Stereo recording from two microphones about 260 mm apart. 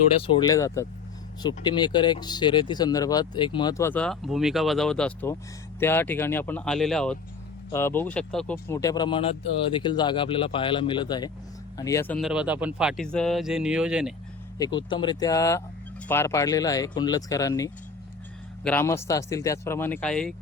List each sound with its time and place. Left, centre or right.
0.2 s speech: centre
14.6 s speech: centre